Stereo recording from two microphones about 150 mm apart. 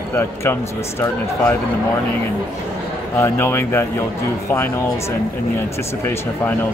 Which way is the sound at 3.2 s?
15° left (ahead or behind).